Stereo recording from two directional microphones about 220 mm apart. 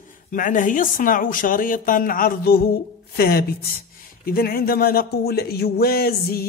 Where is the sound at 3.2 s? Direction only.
45° left (ahead or behind).